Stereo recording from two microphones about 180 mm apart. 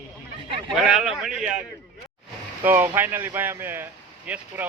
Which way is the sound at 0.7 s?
Centre (ahead or behind).